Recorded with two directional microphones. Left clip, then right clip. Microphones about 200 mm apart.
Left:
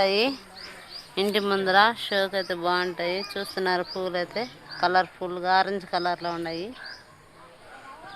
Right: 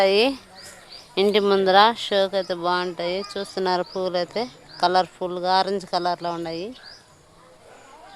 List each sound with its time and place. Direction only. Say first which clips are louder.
0.0 s speech: right 5 dB; 60° right (ahead or behind)